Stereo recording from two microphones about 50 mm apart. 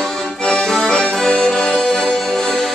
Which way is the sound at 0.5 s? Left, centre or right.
Centre.